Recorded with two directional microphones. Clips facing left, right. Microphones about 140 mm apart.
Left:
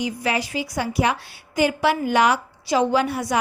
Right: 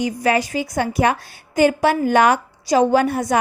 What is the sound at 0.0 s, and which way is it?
A woman's voice, 45° right (ahead or behind).